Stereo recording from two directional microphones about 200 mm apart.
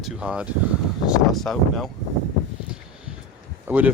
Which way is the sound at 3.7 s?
10° right (ahead or behind).